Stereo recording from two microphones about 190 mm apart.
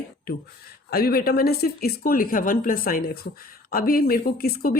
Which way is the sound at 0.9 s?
55° left (ahead or behind).